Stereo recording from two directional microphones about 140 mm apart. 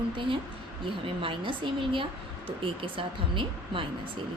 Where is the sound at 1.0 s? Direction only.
40° right (ahead or behind).